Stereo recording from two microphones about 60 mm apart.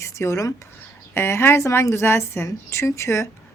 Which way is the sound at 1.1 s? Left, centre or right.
Left.